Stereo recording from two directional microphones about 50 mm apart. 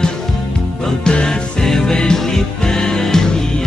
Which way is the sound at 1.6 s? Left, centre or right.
Centre.